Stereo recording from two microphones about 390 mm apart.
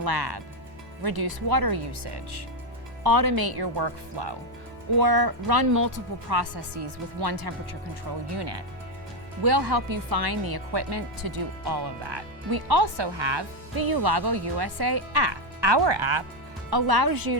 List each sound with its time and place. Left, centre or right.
0.0 s speech: right
1.0 s speech: right
3.0 s speech: right
4.9 s speech: right
6.3 s speech: right
8.4 s speech: right
9.4 s speech: right
16.6 s speech: right